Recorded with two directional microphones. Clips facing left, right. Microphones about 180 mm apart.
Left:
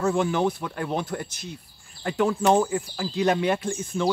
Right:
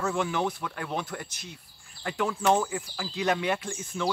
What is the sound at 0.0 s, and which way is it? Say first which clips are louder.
Speech: left 5 dB; 35° left (ahead or behind).